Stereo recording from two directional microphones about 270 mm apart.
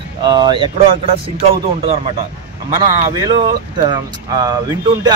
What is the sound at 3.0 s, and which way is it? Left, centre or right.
Speech, centre.